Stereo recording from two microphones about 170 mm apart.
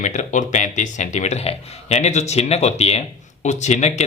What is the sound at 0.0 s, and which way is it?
Speech, 45° left (ahead or behind).